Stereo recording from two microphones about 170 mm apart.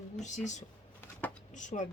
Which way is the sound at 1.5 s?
45° left (ahead or behind).